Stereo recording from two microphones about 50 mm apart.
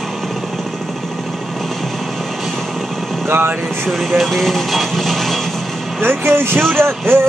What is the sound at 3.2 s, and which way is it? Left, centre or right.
Speech, right.